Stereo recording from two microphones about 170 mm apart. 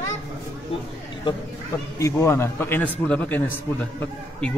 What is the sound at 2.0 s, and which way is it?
A man's voice, 15° left (ahead or behind).